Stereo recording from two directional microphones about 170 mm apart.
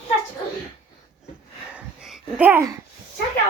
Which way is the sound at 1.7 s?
5° right (ahead or behind).